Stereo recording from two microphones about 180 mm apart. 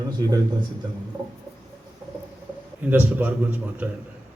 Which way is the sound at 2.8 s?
10° right (ahead or behind).